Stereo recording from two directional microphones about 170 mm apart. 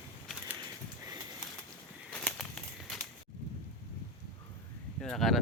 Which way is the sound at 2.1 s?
5° left (ahead or behind).